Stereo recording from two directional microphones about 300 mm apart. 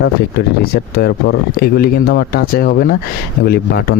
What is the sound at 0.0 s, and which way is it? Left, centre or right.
Speech, left.